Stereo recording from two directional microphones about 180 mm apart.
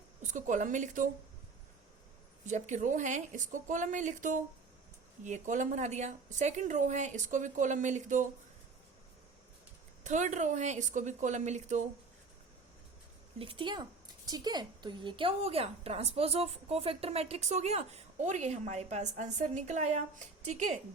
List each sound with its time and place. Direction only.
0.2 s a woman's voice: 45° right (ahead or behind)
2.5 s a woman's voice: 40° right (ahead or behind)
10.0 s a woman's voice: 40° right (ahead or behind)
13.4 s a woman's voice: 30° right (ahead or behind)